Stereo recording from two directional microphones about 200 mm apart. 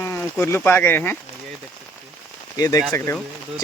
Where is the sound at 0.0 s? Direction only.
10° left (ahead or behind).